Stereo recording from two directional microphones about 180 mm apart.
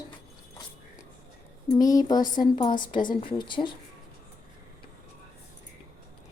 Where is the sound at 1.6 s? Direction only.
20° left (ahead or behind).